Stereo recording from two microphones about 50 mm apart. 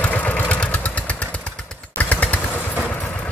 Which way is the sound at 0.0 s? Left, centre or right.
Left.